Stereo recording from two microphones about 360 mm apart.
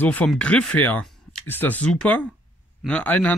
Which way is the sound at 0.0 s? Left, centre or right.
Centre.